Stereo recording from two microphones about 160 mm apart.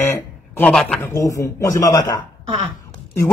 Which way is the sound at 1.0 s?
20° left (ahead or behind).